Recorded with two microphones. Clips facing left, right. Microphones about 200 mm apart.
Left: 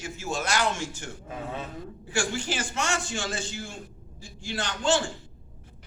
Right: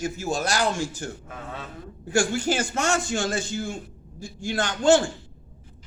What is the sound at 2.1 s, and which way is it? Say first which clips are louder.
A man's voice: right 7 dB; 45° right (ahead or behind).